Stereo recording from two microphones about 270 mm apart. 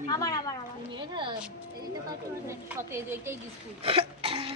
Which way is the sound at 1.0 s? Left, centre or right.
Centre.